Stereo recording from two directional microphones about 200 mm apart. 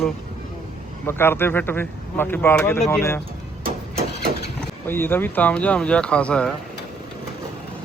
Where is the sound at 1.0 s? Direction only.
10° left (ahead or behind).